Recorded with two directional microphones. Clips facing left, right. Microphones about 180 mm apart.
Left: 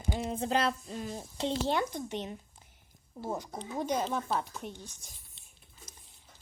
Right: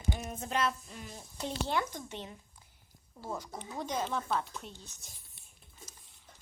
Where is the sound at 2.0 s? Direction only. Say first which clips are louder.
Left 6 dB; 20° left (ahead or behind).